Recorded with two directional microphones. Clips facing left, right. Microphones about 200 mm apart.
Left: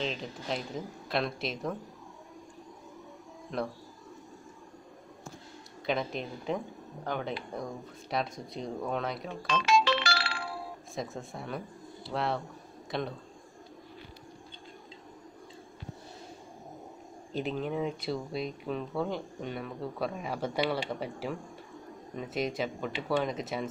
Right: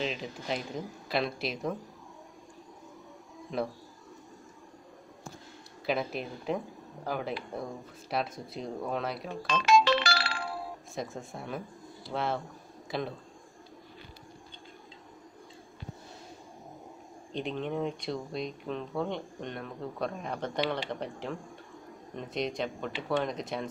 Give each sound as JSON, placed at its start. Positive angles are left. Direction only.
{"t": 0.0, "sound": "speech", "side_deg": -5}
{"t": 3.5, "sound": "speech", "side_deg": 0}
{"t": 5.9, "sound": "speech", "side_deg": -5}
{"t": 9.5, "sound": "music", "side_deg": -45}
{"t": 11.0, "sound": "speech", "side_deg": 0}
{"t": 17.3, "sound": "speech", "side_deg": 5}